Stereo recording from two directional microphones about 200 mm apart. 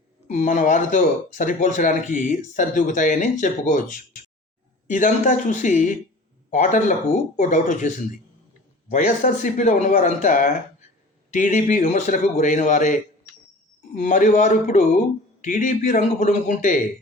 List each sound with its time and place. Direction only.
0.3 s speech: 40° left (ahead or behind)